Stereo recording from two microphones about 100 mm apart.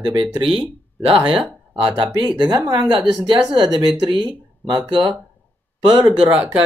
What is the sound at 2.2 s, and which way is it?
Speech, 50° right (ahead or behind).